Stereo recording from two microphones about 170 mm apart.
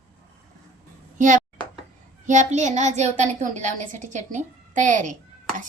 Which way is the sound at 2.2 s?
45° right (ahead or behind).